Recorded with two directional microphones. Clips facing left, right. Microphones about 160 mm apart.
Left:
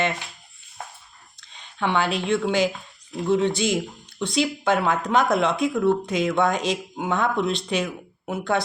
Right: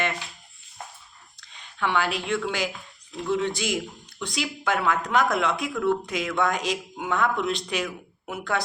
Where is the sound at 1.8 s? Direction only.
25° left (ahead or behind).